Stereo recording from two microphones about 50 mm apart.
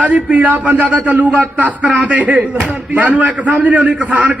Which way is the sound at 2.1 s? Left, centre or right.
Right.